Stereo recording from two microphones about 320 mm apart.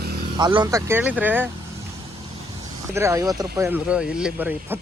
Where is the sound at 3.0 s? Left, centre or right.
Centre.